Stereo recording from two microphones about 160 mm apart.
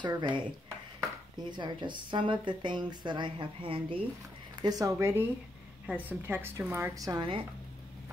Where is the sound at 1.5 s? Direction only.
30° right (ahead or behind).